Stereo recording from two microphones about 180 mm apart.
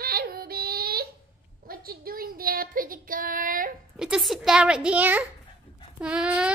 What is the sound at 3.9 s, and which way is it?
A child's voice, 5° right (ahead or behind).